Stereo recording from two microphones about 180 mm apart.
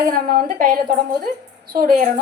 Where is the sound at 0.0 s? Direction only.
50° right (ahead or behind).